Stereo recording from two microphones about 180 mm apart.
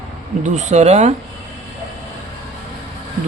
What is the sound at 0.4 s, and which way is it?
Speech, 40° right (ahead or behind).